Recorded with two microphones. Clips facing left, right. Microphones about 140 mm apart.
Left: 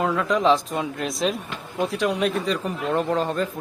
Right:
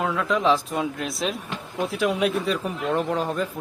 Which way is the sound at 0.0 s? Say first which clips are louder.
Left 2 dB; centre (ahead or behind).